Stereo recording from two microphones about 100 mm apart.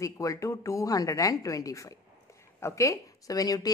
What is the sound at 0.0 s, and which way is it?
Speech, 30° left (ahead or behind).